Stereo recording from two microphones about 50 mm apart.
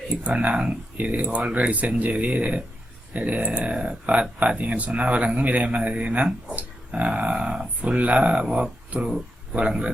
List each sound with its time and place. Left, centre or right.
0.1 s speech: right
6.6 s dog: right
7.8 s speech: right
9.0 s a sound: centre
9.6 s speech: right